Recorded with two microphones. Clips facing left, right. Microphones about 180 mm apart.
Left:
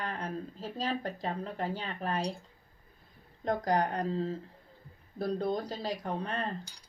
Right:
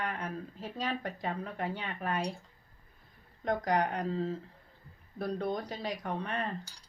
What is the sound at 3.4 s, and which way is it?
Speech, 30° left (ahead or behind).